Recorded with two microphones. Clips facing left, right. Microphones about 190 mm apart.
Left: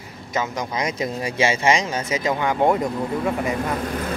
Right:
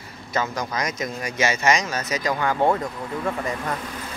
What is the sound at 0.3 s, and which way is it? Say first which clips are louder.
Speech: left 1 dB; 20° left (ahead or behind).